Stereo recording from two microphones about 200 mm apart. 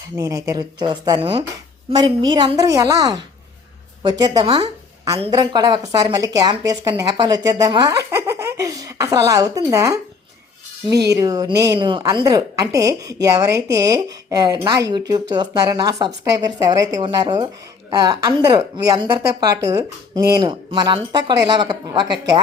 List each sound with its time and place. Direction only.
0.2 s a woman's voice: 15° right (ahead or behind)
11.1 s a woman's voice: 20° right (ahead or behind)